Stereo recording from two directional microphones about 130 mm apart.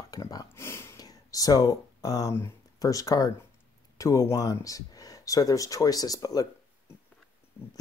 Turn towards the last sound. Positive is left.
turn(degrees=30)  # may be behind; listen again after turning